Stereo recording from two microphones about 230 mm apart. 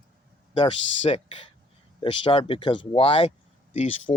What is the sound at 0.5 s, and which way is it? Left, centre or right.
Speech, left.